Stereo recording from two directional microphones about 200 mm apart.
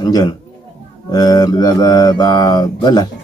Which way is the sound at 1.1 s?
20° left (ahead or behind).